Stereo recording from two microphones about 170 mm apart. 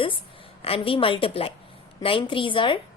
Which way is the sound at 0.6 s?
35° left (ahead or behind).